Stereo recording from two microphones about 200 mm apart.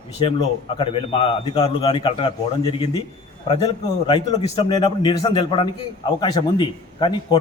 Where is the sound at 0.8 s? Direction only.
25° left (ahead or behind).